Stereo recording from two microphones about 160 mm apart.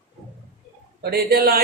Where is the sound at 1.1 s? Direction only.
75° right (ahead or behind).